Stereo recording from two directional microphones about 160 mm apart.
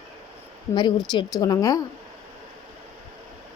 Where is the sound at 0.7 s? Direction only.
25° left (ahead or behind).